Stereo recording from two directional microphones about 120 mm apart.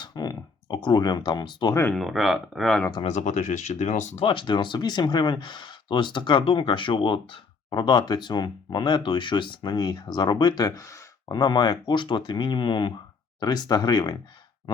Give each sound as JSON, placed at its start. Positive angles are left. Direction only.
{"t": 0.0, "sound": "speech", "side_deg": 35}
{"t": 1.7, "sound": "speech", "side_deg": 20}
{"t": 2.0, "sound": "speech", "side_deg": 0}
{"t": 3.0, "sound": "speech", "side_deg": 70}
{"t": 4.2, "sound": "speech", "side_deg": 45}